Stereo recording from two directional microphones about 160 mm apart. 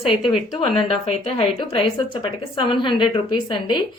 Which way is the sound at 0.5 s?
35° left (ahead or behind).